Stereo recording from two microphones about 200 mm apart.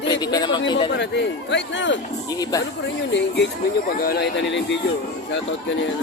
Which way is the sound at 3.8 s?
50° left (ahead or behind).